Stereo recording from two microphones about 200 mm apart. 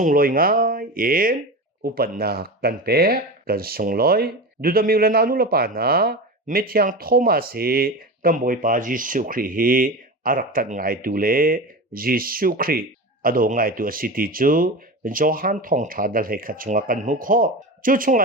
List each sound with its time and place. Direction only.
0.0 s speech: 45° right (ahead or behind)